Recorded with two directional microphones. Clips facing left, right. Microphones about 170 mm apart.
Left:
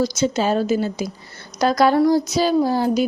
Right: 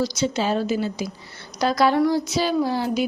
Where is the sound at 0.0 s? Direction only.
45° left (ahead or behind).